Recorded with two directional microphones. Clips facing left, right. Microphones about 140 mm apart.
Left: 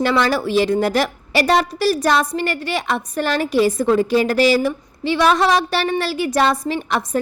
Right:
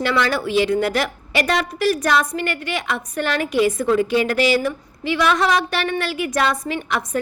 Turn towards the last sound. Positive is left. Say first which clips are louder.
# left 3 dB
turn(degrees=35)  # may be behind; listen again after turning